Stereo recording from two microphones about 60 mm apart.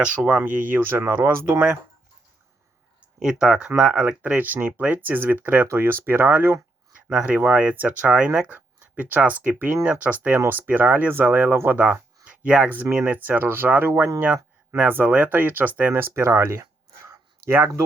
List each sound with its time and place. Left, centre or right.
0.3 s speech: right
3.2 s speech: centre
4.4 s speech: right
5.6 s speech: right
7.1 s speech: centre
11.5 s speech: right
12.2 s a sound: centre
12.6 s speech: right
15.0 s speech: right